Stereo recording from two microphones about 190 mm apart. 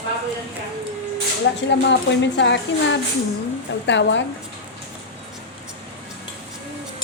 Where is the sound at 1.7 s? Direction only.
70° left (ahead or behind).